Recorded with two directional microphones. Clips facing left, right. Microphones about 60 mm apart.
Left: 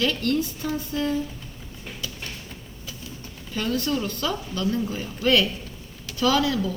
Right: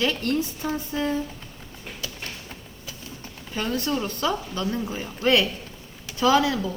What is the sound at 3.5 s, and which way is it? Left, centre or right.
A woman's voice, right.